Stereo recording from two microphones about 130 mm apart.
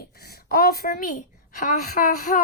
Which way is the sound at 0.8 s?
65° left (ahead or behind).